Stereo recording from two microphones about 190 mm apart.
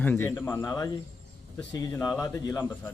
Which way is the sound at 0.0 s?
10° left (ahead or behind).